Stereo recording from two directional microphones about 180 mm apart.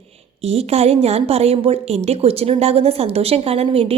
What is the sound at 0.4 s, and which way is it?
A woman's voice, 35° right (ahead or behind).